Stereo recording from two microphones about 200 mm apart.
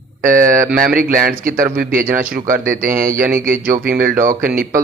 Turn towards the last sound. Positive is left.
turn(degrees=-45)  # may be behind; listen again after turning